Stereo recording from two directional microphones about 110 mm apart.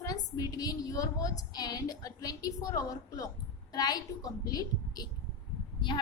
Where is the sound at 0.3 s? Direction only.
35° left (ahead or behind).